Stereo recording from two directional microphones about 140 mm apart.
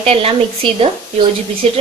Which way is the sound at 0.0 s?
45° right (ahead or behind).